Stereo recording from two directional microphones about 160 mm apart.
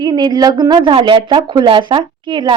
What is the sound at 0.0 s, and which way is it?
A woman's voice, 25° right (ahead or behind).